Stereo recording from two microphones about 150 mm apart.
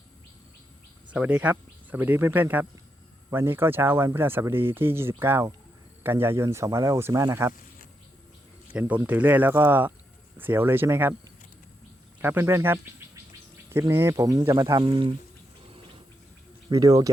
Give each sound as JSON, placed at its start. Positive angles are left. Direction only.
{"t": 1.1, "sound": "speech", "side_deg": -10}
{"t": 8.7, "sound": "speech", "side_deg": -10}
{"t": 12.2, "sound": "speech", "side_deg": -15}
{"t": 16.6, "sound": "speech", "side_deg": -25}